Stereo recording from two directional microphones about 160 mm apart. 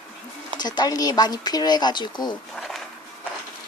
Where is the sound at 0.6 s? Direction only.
25° left (ahead or behind).